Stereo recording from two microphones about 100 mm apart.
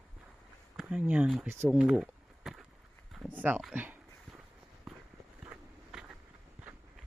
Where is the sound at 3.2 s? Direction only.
15° right (ahead or behind).